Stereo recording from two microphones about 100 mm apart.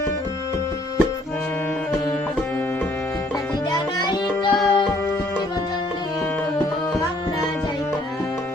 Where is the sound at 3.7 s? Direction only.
50° left (ahead or behind).